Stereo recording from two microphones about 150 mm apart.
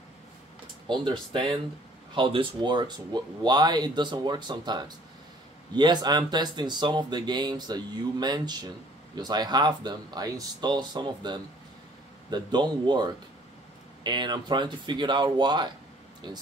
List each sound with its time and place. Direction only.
0.8 s speech: 35° right (ahead or behind)